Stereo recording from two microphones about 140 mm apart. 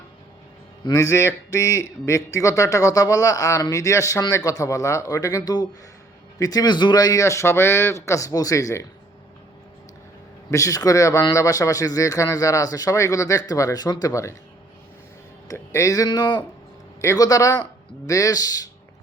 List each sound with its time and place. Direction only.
0.9 s a man's voice: 25° left (ahead or behind)
10.5 s a man's voice: 25° left (ahead or behind)
15.4 s a man's voice: 20° left (ahead or behind)